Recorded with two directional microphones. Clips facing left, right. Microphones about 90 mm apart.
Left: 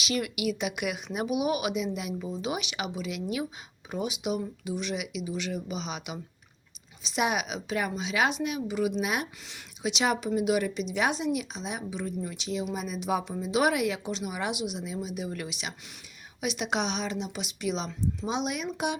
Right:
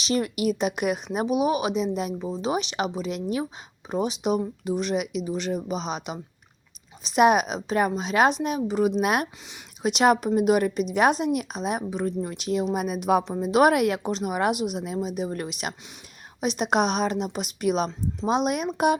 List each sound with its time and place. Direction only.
0.0 s speech: 35° right (ahead or behind)